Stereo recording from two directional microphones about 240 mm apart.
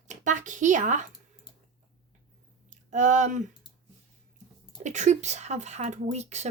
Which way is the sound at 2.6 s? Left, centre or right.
Right.